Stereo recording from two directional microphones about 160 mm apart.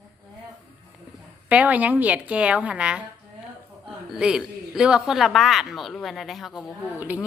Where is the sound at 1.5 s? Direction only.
10° right (ahead or behind).